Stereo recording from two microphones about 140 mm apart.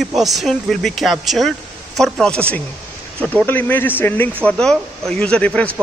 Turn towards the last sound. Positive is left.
turn(degrees=10)  # may be behind; listen again after turning